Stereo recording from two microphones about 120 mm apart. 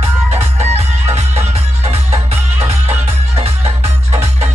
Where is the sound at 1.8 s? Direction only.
60° right (ahead or behind).